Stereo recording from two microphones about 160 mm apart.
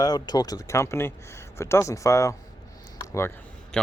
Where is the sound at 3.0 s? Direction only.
15° left (ahead or behind).